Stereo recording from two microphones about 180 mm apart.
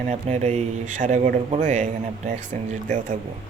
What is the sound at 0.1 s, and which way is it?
Speech, 40° right (ahead or behind).